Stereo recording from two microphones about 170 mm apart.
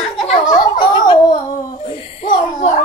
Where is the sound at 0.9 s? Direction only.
25° left (ahead or behind).